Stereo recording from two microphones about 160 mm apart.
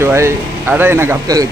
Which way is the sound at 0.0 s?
15° right (ahead or behind).